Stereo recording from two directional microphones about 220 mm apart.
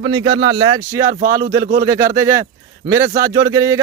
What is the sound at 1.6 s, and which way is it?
Speech, 40° right (ahead or behind).